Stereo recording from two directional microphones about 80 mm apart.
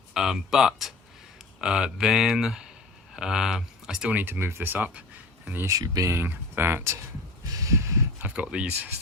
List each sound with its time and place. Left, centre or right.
0.1 s speech: centre
4.1 s speech: right
5.8 s speech: right
6.2 s speech: right
7.6 s a sound: right
8.3 s speech: centre